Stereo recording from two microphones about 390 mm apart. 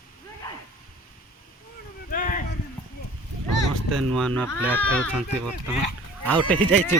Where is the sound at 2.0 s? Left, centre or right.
Centre.